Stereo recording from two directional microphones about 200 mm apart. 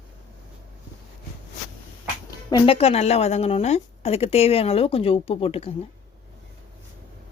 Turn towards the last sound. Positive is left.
turn(degrees=30)  # may be behind; listen again after turning